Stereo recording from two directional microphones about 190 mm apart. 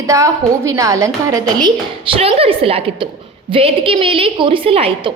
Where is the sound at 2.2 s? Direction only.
30° right (ahead or behind).